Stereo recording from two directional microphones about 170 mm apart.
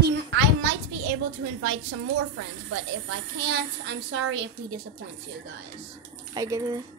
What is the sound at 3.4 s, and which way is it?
Child singing, 90° right.